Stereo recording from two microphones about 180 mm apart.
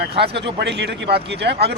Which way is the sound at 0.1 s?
30° right (ahead or behind).